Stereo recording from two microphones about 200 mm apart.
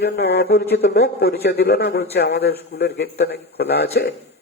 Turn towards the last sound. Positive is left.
turn(degrees=55)  # may be behind; listen again after turning